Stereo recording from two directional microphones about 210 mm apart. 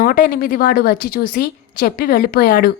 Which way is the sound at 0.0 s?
45° left (ahead or behind).